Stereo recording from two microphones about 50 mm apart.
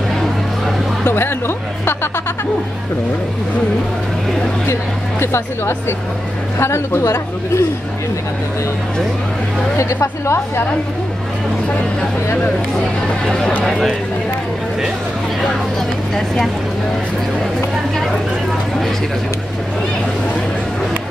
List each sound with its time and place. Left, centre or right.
1.0 s speech: left
5.2 s a woman's voice: left
10.2 s speech: left
13.7 s speech: centre